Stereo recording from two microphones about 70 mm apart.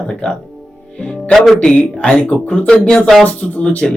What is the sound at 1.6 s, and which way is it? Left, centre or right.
Speech, centre.